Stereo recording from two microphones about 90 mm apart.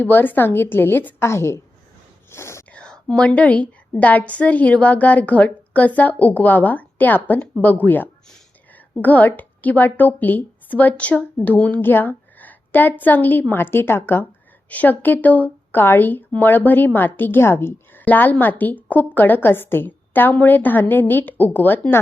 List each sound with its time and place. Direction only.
0.0 s speech: 20° left (ahead or behind)
2.7 s a woman's voice: 10° left (ahead or behind)